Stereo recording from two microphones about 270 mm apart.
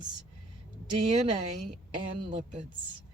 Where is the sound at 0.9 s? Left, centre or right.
Right.